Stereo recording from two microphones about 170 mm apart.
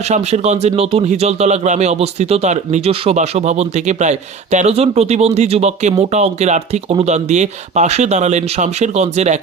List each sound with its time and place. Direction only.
0.1 s speech: 40° right (ahead or behind)